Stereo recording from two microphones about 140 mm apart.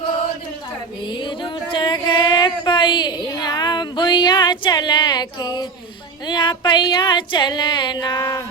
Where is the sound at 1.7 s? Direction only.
35° left (ahead or behind).